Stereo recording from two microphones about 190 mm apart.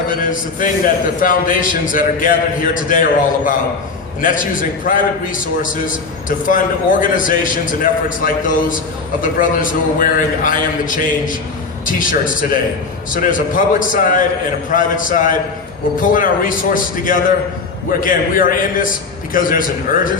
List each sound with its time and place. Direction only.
0.2 s a man's voice: 45° left (ahead or behind)